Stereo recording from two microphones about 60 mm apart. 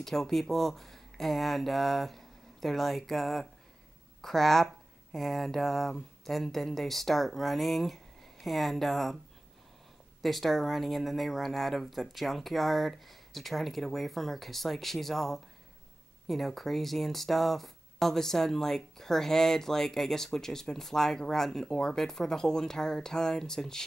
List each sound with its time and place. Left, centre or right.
0.0 s speech: centre
10.2 s speech: centre